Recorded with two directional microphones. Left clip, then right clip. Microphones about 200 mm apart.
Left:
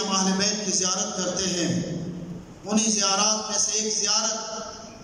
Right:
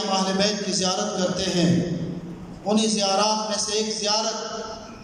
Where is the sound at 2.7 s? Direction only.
20° right (ahead or behind).